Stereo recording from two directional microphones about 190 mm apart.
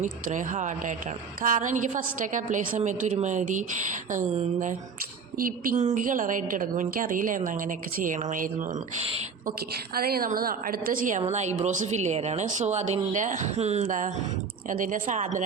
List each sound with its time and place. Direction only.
0.0 s a woman's voice: 40° right (ahead or behind)
5.4 s a woman's voice: 50° right (ahead or behind)
9.5 s a woman's voice: 55° right (ahead or behind)